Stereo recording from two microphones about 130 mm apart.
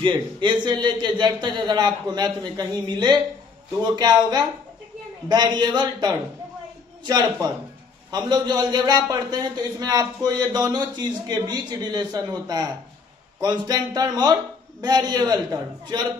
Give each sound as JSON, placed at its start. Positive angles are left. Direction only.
{"t": 0.0, "sound": "a man's voice", "side_deg": -35}